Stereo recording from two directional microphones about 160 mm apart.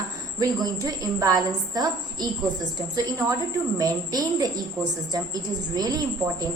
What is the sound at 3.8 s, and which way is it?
A woman's voice, 20° right (ahead or behind).